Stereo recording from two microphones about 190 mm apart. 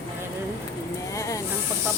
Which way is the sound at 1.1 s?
15° left (ahead or behind).